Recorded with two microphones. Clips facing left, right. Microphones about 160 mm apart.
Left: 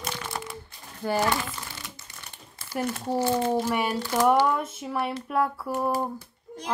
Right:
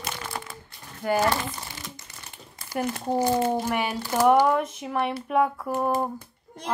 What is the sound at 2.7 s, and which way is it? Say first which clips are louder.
A child's voice: right 1 dB; 15° right (ahead or behind).